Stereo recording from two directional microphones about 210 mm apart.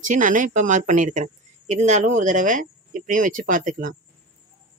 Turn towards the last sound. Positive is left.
turn(degrees=-40)  # may be behind; listen again after turning